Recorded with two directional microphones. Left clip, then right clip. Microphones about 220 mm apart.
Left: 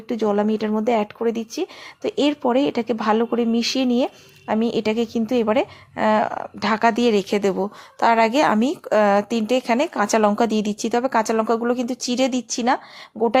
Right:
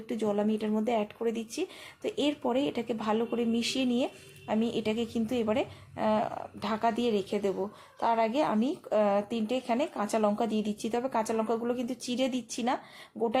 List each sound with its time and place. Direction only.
0.1 s speech: 20° left (ahead or behind)